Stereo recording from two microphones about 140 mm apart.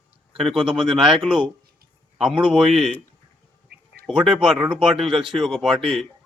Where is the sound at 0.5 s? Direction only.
40° right (ahead or behind).